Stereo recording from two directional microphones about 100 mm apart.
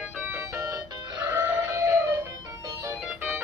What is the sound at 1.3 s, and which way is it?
Music, 25° right (ahead or behind).